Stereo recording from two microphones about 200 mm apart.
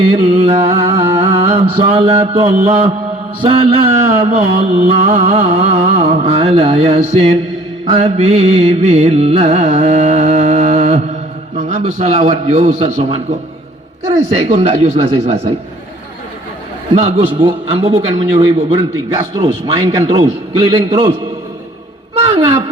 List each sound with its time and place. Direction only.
0.1 s music: 25° right (ahead or behind)
3.4 s a man's voice: 25° right (ahead or behind)
4.2 s music: 30° right (ahead or behind)
14.3 s music: 30° right (ahead or behind)
16.9 s a man's voice: 30° right (ahead or behind)